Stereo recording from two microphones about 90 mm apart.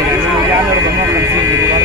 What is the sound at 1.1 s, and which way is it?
Speech, 35° right (ahead or behind).